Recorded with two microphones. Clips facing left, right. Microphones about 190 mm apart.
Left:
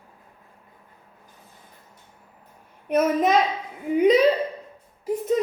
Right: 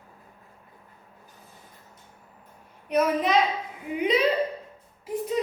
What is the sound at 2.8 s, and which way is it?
Speech, 50° left (ahead or behind).